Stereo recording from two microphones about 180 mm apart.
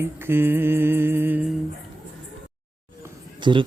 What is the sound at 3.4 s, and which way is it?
Speech, 25° right (ahead or behind).